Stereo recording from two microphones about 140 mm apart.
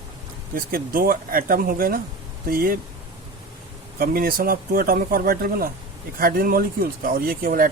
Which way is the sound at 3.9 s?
90° right.